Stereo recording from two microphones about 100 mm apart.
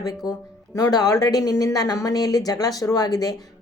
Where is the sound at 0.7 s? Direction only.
40° left (ahead or behind).